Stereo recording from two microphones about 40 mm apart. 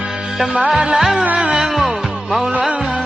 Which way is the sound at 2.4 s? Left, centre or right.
Right.